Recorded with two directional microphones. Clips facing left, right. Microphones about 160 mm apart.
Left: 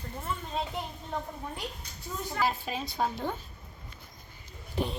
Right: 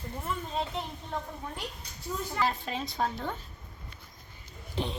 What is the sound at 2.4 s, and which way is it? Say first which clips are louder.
Speech: left 1 dB; 5° left (ahead or behind).